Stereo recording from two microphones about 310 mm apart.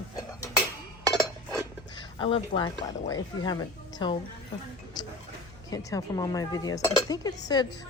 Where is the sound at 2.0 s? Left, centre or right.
Centre.